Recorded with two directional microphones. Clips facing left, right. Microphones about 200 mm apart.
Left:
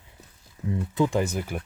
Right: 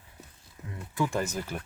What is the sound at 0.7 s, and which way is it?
Speech, 20° left (ahead or behind).